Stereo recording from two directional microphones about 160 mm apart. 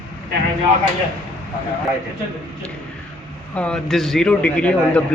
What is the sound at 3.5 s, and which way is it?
A man's voice, 5° left (ahead or behind).